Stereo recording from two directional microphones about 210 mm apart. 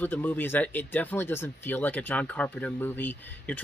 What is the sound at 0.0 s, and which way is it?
Speech, 10° left (ahead or behind).